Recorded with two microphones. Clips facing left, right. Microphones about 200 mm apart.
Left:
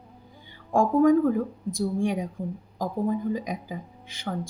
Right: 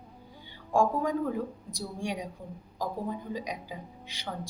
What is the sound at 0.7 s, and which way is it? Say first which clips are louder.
Speech: left 8 dB; 50° left (ahead or behind).